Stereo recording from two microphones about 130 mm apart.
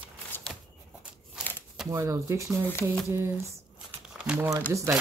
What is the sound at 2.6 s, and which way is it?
Speech, 15° left (ahead or behind).